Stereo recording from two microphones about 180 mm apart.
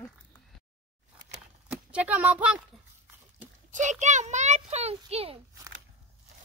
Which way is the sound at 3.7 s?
40° right (ahead or behind).